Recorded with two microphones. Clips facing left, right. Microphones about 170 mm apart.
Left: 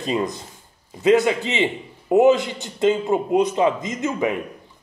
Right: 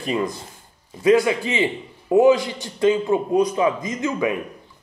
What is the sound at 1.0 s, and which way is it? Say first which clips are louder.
Speech: even; 25° left (ahead or behind).